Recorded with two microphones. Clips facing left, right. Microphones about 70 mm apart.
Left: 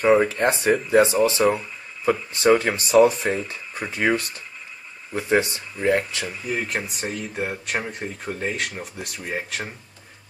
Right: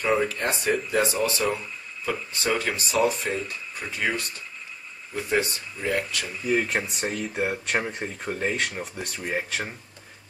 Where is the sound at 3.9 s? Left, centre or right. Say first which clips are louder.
Left 6 dB; left.